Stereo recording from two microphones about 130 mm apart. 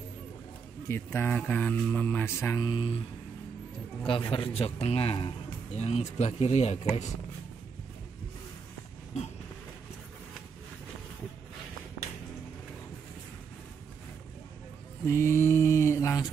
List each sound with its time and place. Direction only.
0.8 s speech: 20° left (ahead or behind)
2.6 s speech: 40° left (ahead or behind)
4.0 s a man's voice: 40° left (ahead or behind)
5.7 s speech: 55° left (ahead or behind)
15.0 s mantra: 20° left (ahead or behind)